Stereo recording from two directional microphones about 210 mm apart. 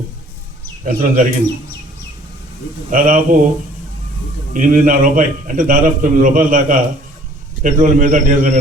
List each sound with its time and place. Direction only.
0.9 s a man's voice: 40° right (ahead or behind)
2.9 s a man's voice: 40° right (ahead or behind)
4.5 s a man's voice: 40° right (ahead or behind)